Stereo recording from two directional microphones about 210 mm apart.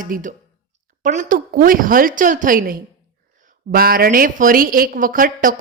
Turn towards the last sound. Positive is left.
turn(degrees=-40)  # may be behind; listen again after turning